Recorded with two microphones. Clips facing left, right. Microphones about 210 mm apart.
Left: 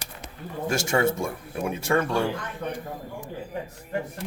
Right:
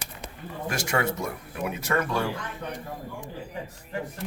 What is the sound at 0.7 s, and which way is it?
Speech, 25° left (ahead or behind).